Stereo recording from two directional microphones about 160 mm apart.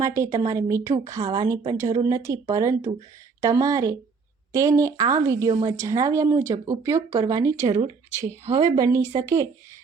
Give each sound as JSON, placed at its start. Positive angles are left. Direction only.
{"t": 0.0, "sound": "speech", "side_deg": -20}